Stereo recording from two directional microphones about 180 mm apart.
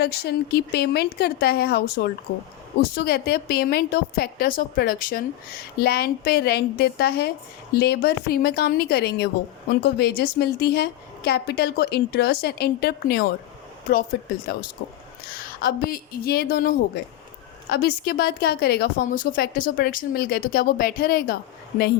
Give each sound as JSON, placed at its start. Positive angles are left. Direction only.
{"t": 0.0, "sound": "a woman's voice", "side_deg": 65}
{"t": 15.6, "sound": "a woman's voice", "side_deg": 55}
{"t": 19.0, "sound": "speech", "side_deg": 45}